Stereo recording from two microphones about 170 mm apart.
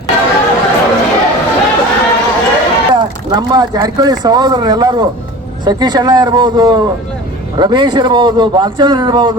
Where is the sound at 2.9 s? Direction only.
25° right (ahead or behind).